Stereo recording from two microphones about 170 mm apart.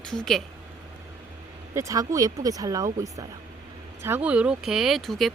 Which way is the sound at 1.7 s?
20° right (ahead or behind).